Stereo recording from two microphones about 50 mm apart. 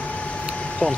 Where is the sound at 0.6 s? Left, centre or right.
Left.